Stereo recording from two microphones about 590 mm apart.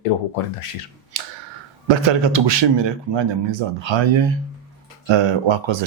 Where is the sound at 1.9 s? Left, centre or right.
Right.